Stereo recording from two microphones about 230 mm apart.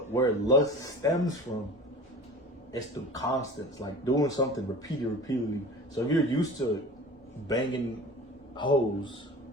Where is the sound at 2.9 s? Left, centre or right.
Centre.